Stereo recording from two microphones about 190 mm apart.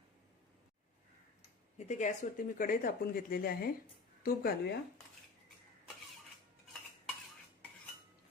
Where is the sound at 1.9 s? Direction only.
40° left (ahead or behind).